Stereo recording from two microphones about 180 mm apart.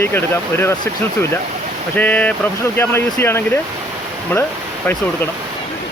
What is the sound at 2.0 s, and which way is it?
Speech, 10° left (ahead or behind).